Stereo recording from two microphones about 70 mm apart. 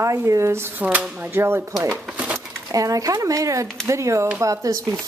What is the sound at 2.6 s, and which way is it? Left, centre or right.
Speech, right.